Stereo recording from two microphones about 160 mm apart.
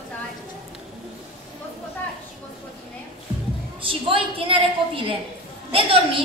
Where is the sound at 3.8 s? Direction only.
35° right (ahead or behind).